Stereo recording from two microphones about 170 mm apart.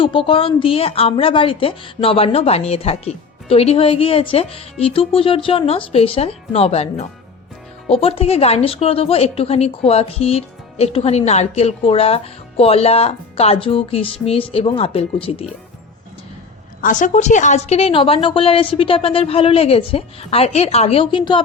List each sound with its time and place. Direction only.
0.0 s a woman's voice: 30° left (ahead or behind)
16.8 s a woman's voice: 50° left (ahead or behind); by 21.4 s 30° left (ahead or behind)